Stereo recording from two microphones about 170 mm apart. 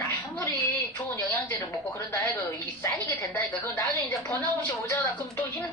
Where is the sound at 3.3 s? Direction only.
15° left (ahead or behind).